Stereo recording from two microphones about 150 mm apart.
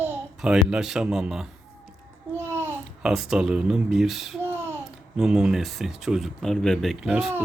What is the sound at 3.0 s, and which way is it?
Speech, centre (ahead or behind).